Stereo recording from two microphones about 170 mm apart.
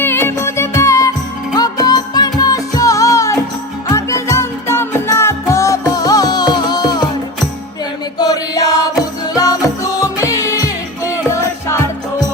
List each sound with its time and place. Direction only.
0.0 s music of bollywood: 15° left (ahead or behind)
1.5 s music: 20° left (ahead or behind)
8.2 s chant: 25° left (ahead or behind)
9.3 s music: 20° left (ahead or behind)